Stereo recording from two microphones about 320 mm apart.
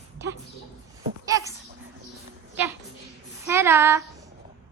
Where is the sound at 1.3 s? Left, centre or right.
Centre.